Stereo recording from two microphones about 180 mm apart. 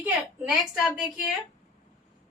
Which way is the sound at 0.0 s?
5° right (ahead or behind).